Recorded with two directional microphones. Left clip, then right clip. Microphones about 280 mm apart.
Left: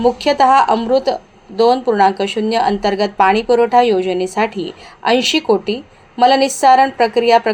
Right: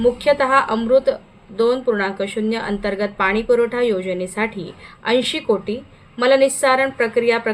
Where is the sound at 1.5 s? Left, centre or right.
Left.